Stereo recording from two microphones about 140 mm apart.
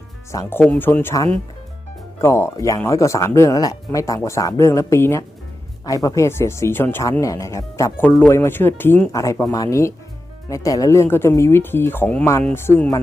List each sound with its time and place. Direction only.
0.3 s speech: 20° left (ahead or behind)
2.2 s speech: 20° left (ahead or behind)